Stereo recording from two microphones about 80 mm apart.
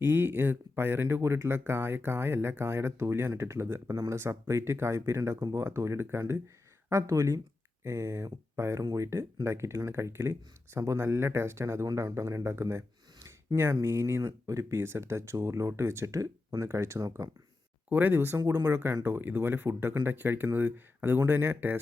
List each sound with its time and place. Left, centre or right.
0.0 s speech: right
6.9 s speech: right
8.8 s speech: right
9.0 s speech: right
17.8 s speech: right
18.3 s speech: right
19.0 s speech: right